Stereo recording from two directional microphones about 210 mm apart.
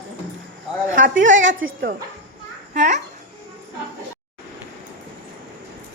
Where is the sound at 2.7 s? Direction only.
35° right (ahead or behind).